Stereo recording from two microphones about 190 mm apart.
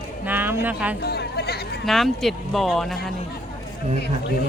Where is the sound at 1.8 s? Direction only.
Centre (ahead or behind).